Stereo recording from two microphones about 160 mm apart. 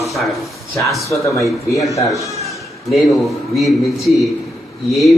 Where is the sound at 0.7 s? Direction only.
20° left (ahead or behind).